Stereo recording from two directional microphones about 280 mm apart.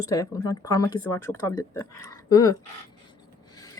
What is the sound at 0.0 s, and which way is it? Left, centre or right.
Speech, centre.